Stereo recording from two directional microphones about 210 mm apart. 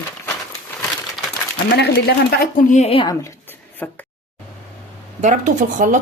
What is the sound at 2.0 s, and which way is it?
A woman's voice, 45° left (ahead or behind).